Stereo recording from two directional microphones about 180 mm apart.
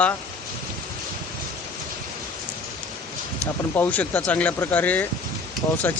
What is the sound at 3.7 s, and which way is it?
Speech, 10° left (ahead or behind).